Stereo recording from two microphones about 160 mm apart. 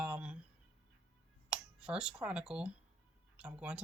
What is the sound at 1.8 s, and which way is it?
Speech, 5° right (ahead or behind).